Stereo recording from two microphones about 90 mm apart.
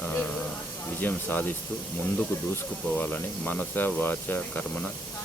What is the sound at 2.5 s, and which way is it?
Speech, 20° left (ahead or behind).